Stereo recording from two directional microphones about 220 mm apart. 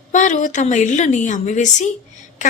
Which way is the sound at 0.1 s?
35° left (ahead or behind).